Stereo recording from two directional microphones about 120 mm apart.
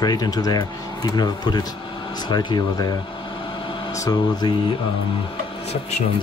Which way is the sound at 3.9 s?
30° left (ahead or behind).